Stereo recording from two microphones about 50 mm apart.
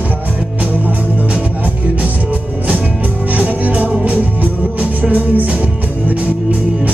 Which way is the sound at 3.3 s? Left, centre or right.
Right.